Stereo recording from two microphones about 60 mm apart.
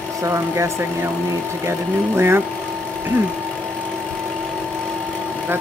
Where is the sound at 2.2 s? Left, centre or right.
Right.